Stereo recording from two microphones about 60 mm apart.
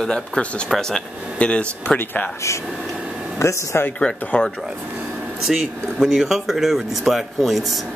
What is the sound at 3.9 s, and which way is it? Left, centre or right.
Speech, centre.